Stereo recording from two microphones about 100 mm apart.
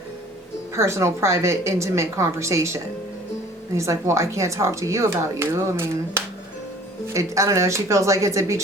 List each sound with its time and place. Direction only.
0.7 s speech: 30° right (ahead or behind)